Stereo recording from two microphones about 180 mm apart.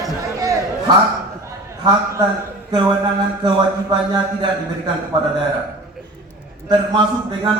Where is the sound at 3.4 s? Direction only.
20° right (ahead or behind).